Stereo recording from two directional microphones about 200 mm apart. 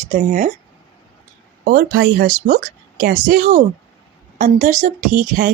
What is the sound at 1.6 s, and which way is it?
A woman's voice, 50° right (ahead or behind).